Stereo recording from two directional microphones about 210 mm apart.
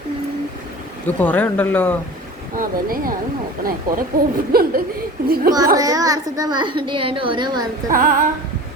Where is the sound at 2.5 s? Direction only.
40° right (ahead or behind).